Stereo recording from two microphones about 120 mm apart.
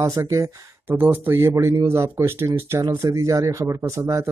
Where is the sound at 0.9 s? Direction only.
15° right (ahead or behind).